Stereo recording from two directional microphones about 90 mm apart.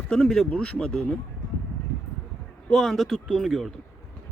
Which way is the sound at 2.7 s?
Centre (ahead or behind).